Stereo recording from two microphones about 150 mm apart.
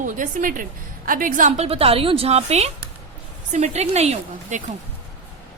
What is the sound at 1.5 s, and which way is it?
A woman's voice, 40° right (ahead or behind).